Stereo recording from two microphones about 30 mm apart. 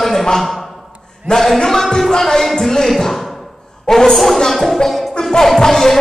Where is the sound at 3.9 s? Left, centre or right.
Centre.